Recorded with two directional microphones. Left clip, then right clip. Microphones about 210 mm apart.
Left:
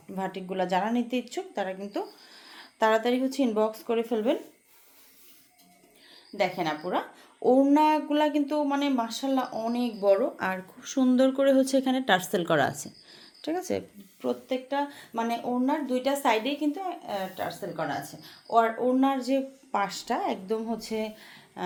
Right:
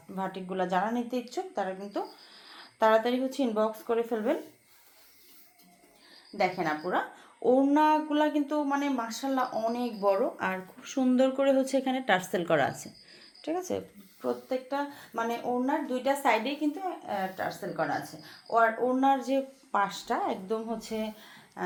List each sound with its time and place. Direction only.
0.2 s speech: 35° left (ahead or behind)
6.4 s a woman's voice: 45° left (ahead or behind)